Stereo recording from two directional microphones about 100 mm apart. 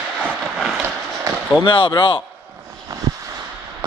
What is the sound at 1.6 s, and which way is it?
Speech, 55° left (ahead or behind).